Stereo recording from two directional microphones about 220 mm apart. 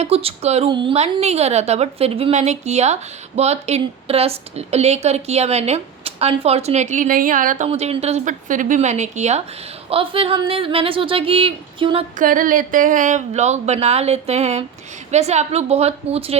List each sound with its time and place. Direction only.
0.0 s a woman's voice: 25° right (ahead or behind)
12.1 s a woman's voice: 40° right (ahead or behind)